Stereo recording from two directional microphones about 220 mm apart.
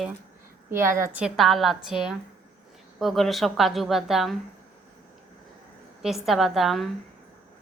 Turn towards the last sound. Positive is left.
turn(degrees=0)  # may be behind; listen again after turning